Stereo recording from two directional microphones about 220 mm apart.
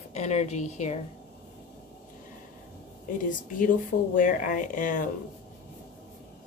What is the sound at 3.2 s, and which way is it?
A woman's voice, 40° left (ahead or behind).